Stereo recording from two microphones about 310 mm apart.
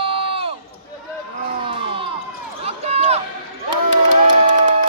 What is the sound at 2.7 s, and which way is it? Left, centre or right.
Run, right.